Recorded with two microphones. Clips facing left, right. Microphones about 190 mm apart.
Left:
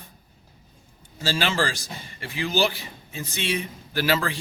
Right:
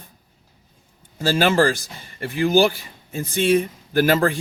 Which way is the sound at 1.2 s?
50° right (ahead or behind).